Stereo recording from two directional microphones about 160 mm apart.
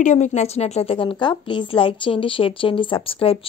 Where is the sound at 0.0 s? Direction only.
50° left (ahead or behind).